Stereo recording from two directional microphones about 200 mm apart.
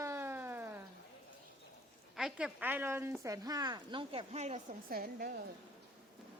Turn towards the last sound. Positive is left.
turn(degrees=-50)  # may be behind; listen again after turning